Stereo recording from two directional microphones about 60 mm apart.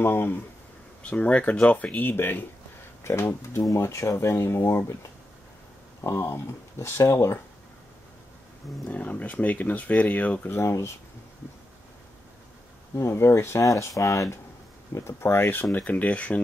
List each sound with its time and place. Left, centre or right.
0.0 s speech: left
1.0 s speech: centre
2.0 s speech: left
8.8 s speech: left
10.5 s speech: left
12.9 s speech: left
13.7 s speech: left
15.0 s speech: left
15.8 s speech: left